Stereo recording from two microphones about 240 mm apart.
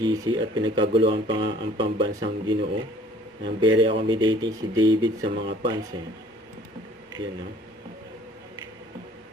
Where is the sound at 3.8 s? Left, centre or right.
Right.